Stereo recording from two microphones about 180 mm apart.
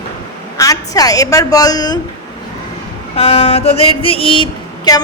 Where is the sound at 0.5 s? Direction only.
20° left (ahead or behind).